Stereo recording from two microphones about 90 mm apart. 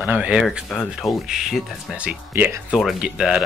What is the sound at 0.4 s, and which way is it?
Speech, centre (ahead or behind).